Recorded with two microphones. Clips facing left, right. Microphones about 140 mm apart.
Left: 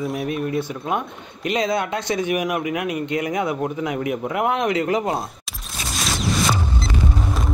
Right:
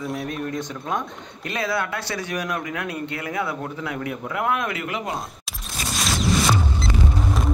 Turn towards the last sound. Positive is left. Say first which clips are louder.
# even
turn(degrees=0)  # may be behind; listen again after turning